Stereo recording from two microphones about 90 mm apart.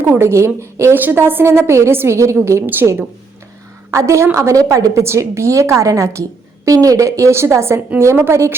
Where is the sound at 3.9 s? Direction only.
35° right (ahead or behind).